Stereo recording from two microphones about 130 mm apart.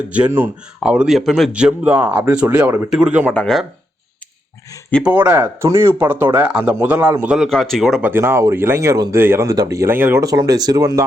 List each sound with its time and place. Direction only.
0.3 s speech: 15° right (ahead or behind)
0.8 s speech: 5° right (ahead or behind)
3.3 s speech: 5° left (ahead or behind)
5.0 s speech: 10° right (ahead or behind)
7.3 s speech: centre (ahead or behind)
8.0 s speech: 15° right (ahead or behind)
10.2 s speech: 30° right (ahead or behind)